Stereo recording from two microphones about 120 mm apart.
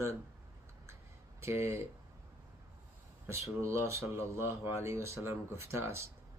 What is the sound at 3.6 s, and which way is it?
Speech, 25° right (ahead or behind).